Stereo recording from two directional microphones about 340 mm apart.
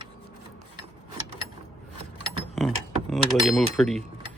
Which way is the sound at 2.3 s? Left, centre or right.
Centre.